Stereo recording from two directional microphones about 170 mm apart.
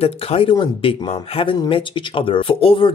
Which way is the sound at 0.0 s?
35° left (ahead or behind).